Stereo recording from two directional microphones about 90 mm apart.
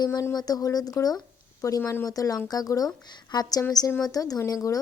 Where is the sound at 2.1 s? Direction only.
45° left (ahead or behind).